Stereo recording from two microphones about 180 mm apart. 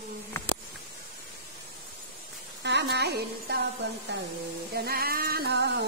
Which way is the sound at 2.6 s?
70° right (ahead or behind).